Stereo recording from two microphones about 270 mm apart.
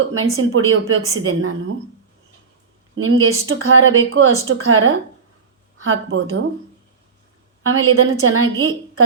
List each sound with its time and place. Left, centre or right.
0.0 s a woman's voice: right
2.9 s a woman's voice: right
7.6 s a woman's voice: right